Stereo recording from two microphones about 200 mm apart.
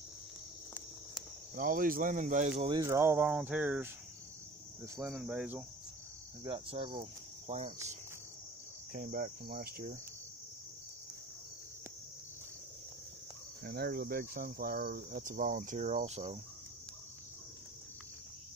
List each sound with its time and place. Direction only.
1.5 s cricket: 45° right (ahead or behind)
2.7 s speech: 15° right (ahead or behind)
5.0 s speech: 5° right (ahead or behind)
6.4 s cricket: 25° right (ahead or behind)
8.9 s cricket: 45° right (ahead or behind)
13.7 s cricket: 50° right (ahead or behind)